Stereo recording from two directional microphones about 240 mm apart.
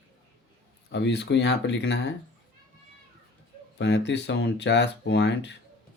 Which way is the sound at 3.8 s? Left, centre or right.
Left.